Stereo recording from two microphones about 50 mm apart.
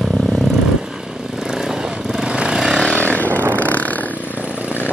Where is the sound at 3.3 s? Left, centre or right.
Right.